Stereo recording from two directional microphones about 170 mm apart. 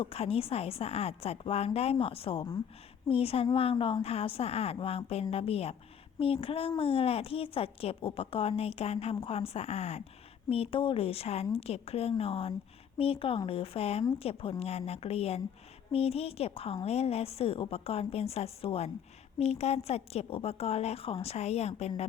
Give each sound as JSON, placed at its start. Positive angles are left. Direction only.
{"t": 0.0, "sound": "a woman's voice", "side_deg": 35}